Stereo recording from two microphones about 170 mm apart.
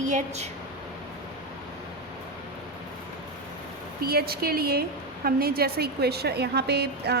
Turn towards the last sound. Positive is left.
turn(degrees=-75)  # may be behind; listen again after turning